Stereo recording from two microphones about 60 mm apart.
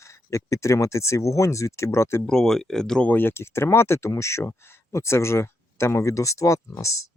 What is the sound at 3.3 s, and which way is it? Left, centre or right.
Speech, left.